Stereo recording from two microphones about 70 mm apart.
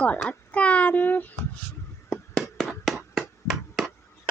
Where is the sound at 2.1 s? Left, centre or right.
Centre.